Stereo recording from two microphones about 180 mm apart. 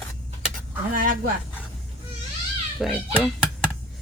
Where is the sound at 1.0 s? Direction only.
50° right (ahead or behind).